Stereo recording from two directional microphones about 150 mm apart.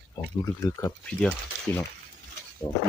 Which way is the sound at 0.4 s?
20° left (ahead or behind).